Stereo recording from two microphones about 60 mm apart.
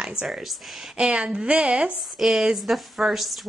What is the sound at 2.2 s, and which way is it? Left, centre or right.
Speech, centre.